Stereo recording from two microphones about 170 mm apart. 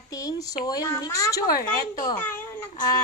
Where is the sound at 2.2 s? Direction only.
10° left (ahead or behind).